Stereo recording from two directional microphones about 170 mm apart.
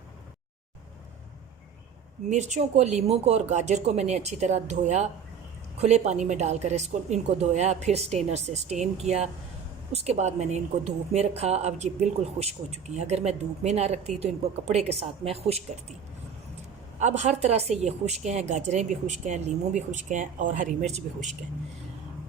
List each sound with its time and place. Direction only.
2.3 s speech: 45° right (ahead or behind)
17.0 s a woman's voice: 45° right (ahead or behind)